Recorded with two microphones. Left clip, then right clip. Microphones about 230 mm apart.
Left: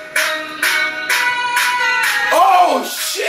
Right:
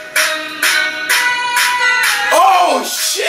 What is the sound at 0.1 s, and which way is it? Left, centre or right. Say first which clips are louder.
Music: right 2 dB; centre.